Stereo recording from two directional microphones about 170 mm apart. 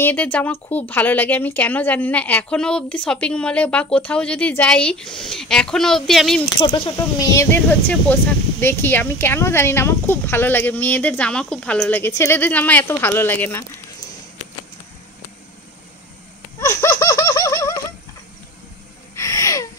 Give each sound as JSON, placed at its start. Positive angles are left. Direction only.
{"t": 0.0, "sound": "speech", "side_deg": 10}
{"t": 6.6, "sound": "speech", "side_deg": 25}
{"t": 16.5, "sound": "laughter", "side_deg": 15}
{"t": 19.1, "sound": "a sound", "side_deg": 20}